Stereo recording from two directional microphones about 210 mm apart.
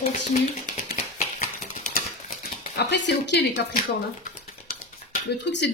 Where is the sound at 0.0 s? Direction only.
35° left (ahead or behind).